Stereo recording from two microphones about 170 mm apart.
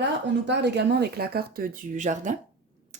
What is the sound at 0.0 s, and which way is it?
Speech, 90° right.